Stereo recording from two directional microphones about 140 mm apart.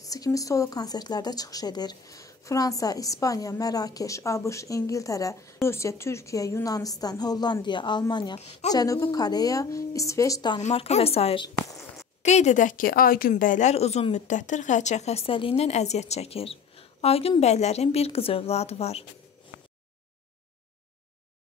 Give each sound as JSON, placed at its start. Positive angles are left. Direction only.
{"t": 0.0, "sound": "a woman's voice", "side_deg": 25}
{"t": 8.4, "sound": "a woman's voice", "side_deg": 50}
{"t": 8.7, "sound": "speech", "side_deg": 25}
{"t": 10.6, "sound": "a woman's voice", "side_deg": 50}